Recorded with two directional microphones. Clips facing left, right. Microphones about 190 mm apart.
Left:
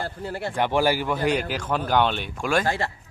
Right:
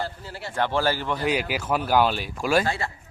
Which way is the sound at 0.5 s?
15° left (ahead or behind).